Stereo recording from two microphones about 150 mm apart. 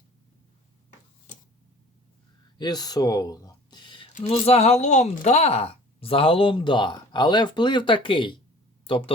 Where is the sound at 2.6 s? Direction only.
25° left (ahead or behind).